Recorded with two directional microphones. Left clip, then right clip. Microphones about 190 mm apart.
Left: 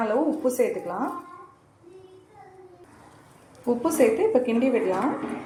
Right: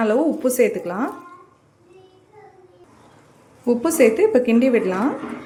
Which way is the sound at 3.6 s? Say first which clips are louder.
Right 5 dB; 35° right (ahead or behind).